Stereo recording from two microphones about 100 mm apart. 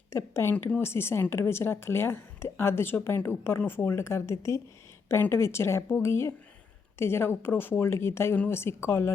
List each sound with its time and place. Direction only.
0.1 s a woman's voice: 25° left (ahead or behind)